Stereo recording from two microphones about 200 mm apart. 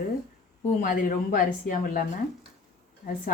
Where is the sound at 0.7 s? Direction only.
45° left (ahead or behind).